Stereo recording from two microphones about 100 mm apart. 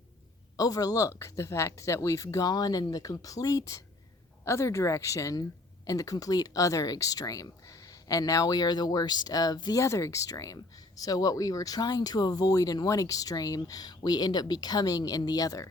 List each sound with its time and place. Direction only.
0.5 s speech: 35° left (ahead or behind)
9.8 s speech: 30° left (ahead or behind)